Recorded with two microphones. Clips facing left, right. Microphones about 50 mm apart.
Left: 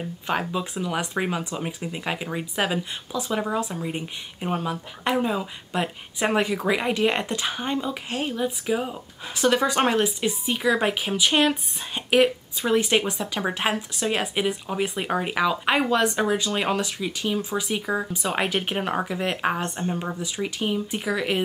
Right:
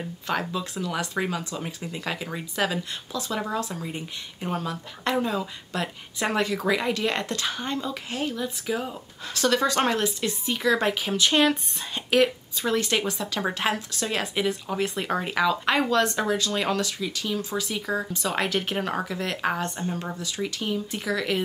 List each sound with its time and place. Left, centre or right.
0.3 s speech: centre